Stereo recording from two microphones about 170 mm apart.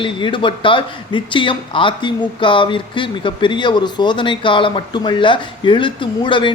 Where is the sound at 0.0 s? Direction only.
30° left (ahead or behind).